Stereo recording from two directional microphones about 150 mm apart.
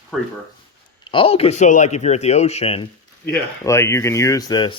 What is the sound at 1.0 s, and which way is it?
Speech, 35° left (ahead or behind).